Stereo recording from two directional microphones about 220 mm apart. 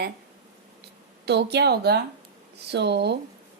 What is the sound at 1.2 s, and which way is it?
A woman's voice, 50° right (ahead or behind).